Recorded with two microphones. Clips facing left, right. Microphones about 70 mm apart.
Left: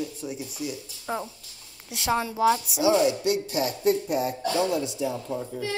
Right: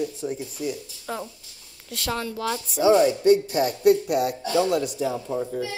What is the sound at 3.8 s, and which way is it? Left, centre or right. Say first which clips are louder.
Speech: right 5 dB; right.